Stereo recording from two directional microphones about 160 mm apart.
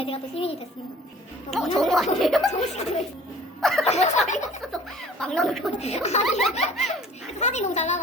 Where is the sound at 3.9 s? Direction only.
45° left (ahead or behind).